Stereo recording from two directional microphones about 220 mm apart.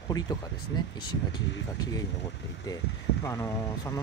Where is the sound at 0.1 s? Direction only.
20° left (ahead or behind).